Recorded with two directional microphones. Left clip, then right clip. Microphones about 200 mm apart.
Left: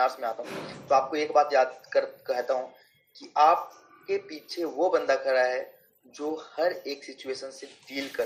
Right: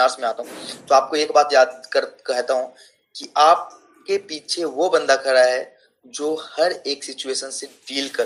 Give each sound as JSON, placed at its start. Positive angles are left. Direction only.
{"t": 0.0, "sound": "speech", "side_deg": -15}